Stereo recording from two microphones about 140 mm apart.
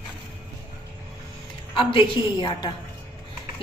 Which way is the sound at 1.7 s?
40° left (ahead or behind).